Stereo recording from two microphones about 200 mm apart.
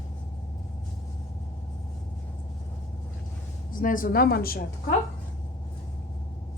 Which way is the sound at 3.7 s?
45° left (ahead or behind).